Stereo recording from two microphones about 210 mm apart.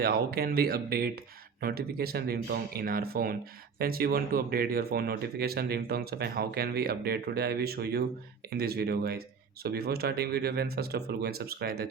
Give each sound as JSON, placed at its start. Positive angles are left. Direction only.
{"t": 0.0, "sound": "speech", "side_deg": -45}